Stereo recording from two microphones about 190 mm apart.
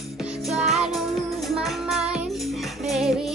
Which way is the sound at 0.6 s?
Centre (ahead or behind).